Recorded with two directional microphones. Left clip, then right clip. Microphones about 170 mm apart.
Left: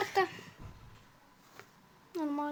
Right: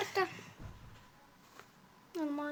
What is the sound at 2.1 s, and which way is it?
Speech, 20° left (ahead or behind).